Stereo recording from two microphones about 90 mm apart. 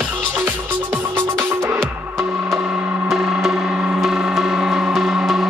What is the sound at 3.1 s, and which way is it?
Gong, 10° right (ahead or behind).